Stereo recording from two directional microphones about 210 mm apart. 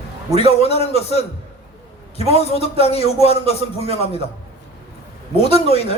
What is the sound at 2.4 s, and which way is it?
A man's voice, 30° left (ahead or behind).